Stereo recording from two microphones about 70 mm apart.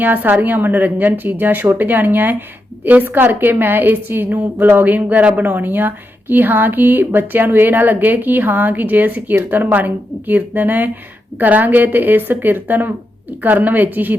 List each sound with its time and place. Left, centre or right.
0.0 s speech: right